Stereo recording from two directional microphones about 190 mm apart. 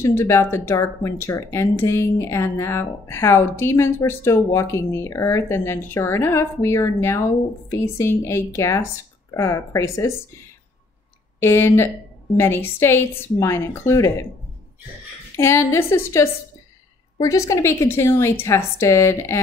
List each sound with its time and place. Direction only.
0.0 s speech: 15° left (ahead or behind)
11.3 s speech: 15° left (ahead or behind)
15.3 s speech: 15° left (ahead or behind)